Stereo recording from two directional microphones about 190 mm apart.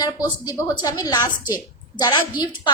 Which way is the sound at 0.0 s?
20° left (ahead or behind).